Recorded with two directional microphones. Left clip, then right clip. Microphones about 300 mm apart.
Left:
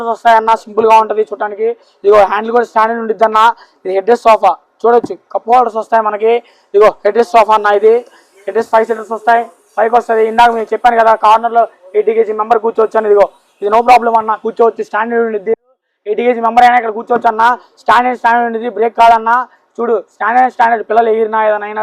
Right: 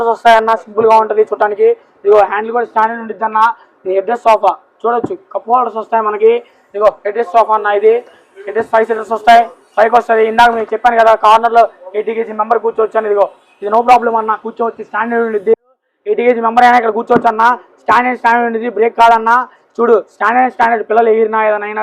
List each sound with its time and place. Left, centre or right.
0.0 s speech: left
1.4 s speech: left
2.0 s speech: left
11.9 s speech: left
14.4 s speech: left
15.0 s speech: left
16.6 s speech: centre
17.2 s speech: left
19.7 s speech: left